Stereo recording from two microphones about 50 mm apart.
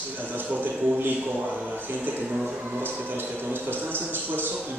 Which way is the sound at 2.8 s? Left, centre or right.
Right.